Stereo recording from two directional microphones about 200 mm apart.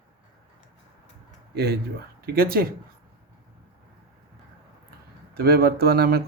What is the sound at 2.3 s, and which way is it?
Speech, 50° right (ahead or behind).